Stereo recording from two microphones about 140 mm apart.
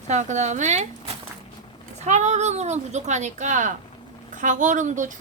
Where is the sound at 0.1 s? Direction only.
55° right (ahead or behind).